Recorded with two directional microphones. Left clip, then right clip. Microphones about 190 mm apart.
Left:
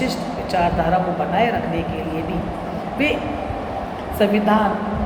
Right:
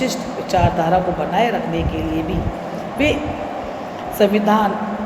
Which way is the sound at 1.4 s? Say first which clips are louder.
Right 1 dB; 45° right (ahead or behind).